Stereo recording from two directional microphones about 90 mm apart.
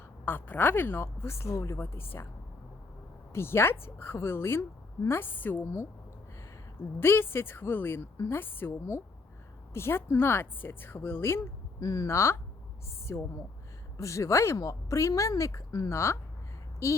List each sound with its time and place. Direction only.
0.3 s speech: 20° left (ahead or behind)
3.3 s speech: 25° left (ahead or behind)
7.0 s speech: 25° left (ahead or behind)
11.8 s speech: 40° left (ahead or behind)